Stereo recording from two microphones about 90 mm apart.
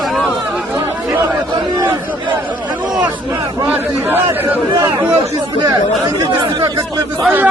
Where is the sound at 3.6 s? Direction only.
20° right (ahead or behind).